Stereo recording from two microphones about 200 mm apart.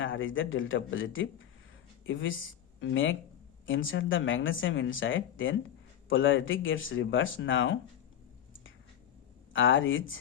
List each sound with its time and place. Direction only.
0.0 s speech: 75° left (ahead or behind)
9.5 s speech: 75° left (ahead or behind)